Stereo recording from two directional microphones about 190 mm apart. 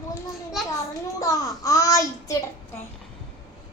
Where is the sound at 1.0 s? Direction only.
20° left (ahead or behind).